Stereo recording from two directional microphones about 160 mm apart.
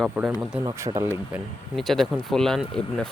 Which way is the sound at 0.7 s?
20° right (ahead or behind).